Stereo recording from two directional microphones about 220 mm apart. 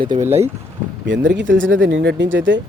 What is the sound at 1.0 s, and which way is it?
Speech, 55° right (ahead or behind).